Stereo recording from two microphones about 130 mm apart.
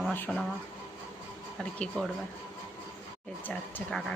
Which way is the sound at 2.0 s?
10° left (ahead or behind).